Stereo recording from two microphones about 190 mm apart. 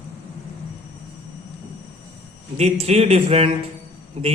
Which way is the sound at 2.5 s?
35° right (ahead or behind).